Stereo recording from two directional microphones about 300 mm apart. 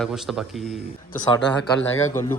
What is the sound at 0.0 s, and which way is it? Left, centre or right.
Speech, centre.